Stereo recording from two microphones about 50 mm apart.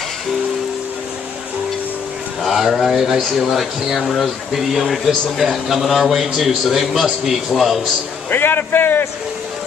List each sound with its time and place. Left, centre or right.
2.4 s speech: centre
8.3 s a man's voice: left